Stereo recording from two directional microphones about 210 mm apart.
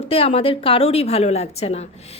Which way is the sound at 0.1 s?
25° left (ahead or behind).